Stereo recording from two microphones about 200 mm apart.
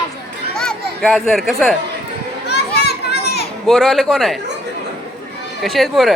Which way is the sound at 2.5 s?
55° left (ahead or behind).